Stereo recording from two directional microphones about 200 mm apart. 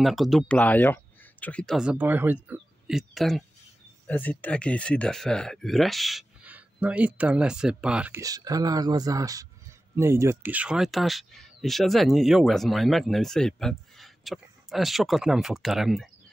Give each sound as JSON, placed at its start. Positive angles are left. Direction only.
{"t": 0.0, "sound": "speech", "side_deg": 0}
{"t": 8.2, "sound": "speech", "side_deg": -20}